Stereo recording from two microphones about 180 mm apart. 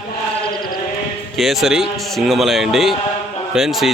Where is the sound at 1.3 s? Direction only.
Centre (ahead or behind).